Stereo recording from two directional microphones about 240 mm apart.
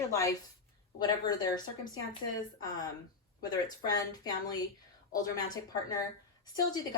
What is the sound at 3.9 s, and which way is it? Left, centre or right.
Speech, centre.